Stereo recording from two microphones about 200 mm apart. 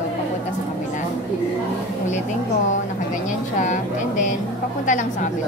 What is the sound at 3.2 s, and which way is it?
A woman's voice, 40° left (ahead or behind).